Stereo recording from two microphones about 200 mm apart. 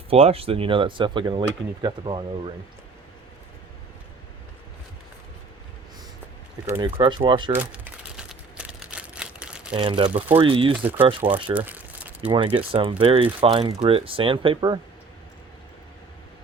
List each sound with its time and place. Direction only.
0.1 s speech: 30° right (ahead or behind)
6.8 s speech: 25° right (ahead or behind)
7.5 s crumpling: 5° right (ahead or behind)
9.7 s speech: 25° right (ahead or behind)
10.8 s speech: 10° right (ahead or behind)
11.5 s crumpling: 10° right (ahead or behind)
12.3 s speech: 25° right (ahead or behind)